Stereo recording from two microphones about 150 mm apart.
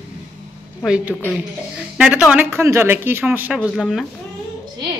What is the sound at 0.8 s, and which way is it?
A woman's voice, 10° right (ahead or behind).